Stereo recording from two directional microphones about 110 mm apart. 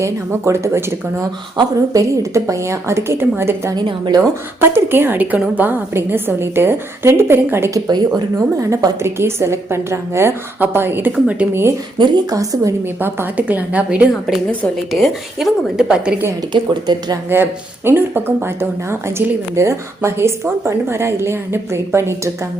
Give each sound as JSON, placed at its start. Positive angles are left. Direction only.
{"t": 0.0, "sound": "speech", "side_deg": -25}
{"t": 3.8, "sound": "a woman's voice", "side_deg": -45}
{"t": 4.6, "sound": "speech", "side_deg": -20}
{"t": 7.9, "sound": "a woman's voice", "side_deg": -40}
{"t": 8.7, "sound": "a woman's voice", "side_deg": -25}
{"t": 11.9, "sound": "a woman's voice", "side_deg": -35}
{"t": 13.0, "sound": "a woman's voice", "side_deg": -20}
{"t": 14.9, "sound": "speech", "side_deg": 0}
{"t": 16.5, "sound": "a woman's voice", "side_deg": -40}
{"t": 17.2, "sound": "speech", "side_deg": -20}